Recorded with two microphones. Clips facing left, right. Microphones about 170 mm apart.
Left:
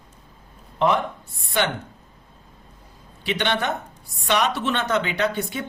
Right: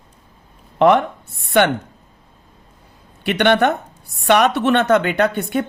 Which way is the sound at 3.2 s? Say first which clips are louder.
Right 9 dB; 60° right (ahead or behind).